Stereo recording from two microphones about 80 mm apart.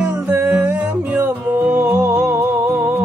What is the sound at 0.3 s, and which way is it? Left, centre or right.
Music, right.